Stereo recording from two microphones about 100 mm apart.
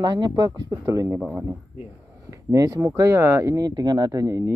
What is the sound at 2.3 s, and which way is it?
Speech, 35° right (ahead or behind).